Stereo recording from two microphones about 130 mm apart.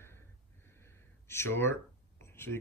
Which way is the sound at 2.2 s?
20° left (ahead or behind).